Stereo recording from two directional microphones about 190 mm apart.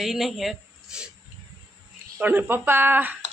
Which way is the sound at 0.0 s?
Centre (ahead or behind).